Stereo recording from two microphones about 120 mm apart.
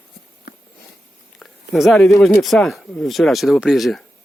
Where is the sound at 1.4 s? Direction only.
Centre (ahead or behind).